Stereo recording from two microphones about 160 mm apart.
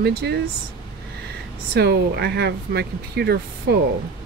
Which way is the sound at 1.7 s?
90° right.